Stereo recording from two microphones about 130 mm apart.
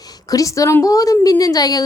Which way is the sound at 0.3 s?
25° left (ahead or behind).